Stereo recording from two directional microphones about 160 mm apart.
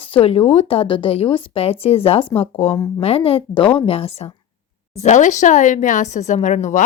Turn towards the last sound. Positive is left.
turn(degrees=50)  # may be behind; listen again after turning